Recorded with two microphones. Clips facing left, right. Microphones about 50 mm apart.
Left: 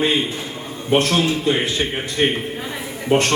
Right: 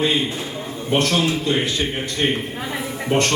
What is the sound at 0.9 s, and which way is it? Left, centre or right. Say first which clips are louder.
A man's voice: left 2 dB; centre.